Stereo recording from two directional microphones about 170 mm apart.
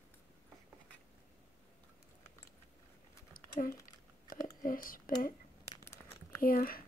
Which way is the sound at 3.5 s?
55° left (ahead or behind).